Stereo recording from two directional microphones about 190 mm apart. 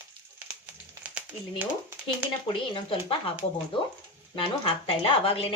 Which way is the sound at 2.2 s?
5° right (ahead or behind).